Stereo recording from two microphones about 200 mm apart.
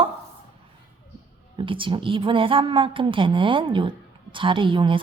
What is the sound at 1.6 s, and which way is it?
A woman's voice, 25° right (ahead or behind).